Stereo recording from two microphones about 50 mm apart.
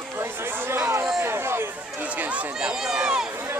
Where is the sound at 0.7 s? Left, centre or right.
Right.